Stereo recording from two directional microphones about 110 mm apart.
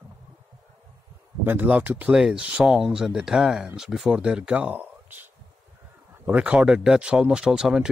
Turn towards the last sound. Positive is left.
turn(degrees=-5)  # may be behind; listen again after turning